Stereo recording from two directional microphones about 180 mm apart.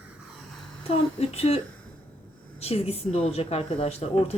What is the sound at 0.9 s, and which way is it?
Speech, 35° left (ahead or behind).